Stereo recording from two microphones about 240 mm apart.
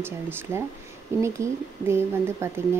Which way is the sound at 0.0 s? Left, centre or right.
Centre.